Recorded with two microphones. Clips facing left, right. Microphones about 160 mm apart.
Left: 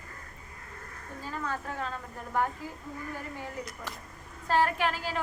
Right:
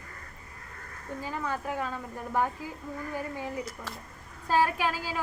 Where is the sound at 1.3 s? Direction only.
15° right (ahead or behind).